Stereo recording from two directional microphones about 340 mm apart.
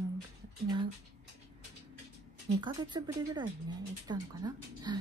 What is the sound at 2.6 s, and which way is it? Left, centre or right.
Speech, centre.